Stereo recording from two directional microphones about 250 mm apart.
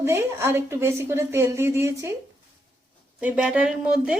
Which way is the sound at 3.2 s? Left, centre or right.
Centre.